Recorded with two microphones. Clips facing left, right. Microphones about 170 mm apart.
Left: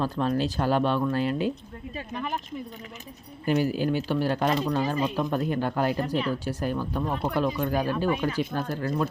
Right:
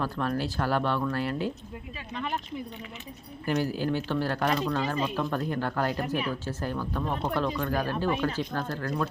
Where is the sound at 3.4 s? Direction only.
15° left (ahead or behind).